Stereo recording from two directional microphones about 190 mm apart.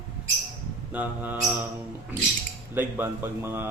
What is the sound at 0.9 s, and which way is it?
Speech, 10° right (ahead or behind).